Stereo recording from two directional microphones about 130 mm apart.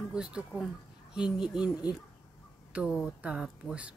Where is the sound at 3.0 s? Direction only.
5° right (ahead or behind).